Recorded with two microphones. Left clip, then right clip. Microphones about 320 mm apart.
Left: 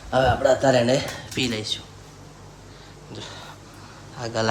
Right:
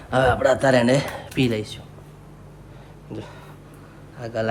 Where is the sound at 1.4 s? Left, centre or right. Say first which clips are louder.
Right 2 dB; centre.